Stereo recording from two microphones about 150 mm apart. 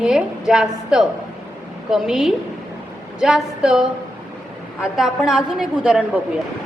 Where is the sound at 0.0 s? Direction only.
5° right (ahead or behind).